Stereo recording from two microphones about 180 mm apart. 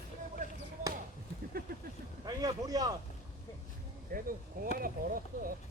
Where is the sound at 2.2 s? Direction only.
20° right (ahead or behind).